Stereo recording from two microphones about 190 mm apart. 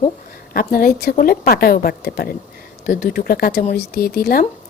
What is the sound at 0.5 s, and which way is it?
A woman's voice, 50° left (ahead or behind).